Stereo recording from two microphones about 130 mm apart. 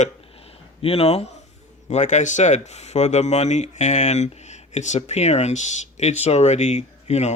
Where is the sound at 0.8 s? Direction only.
50° left (ahead or behind).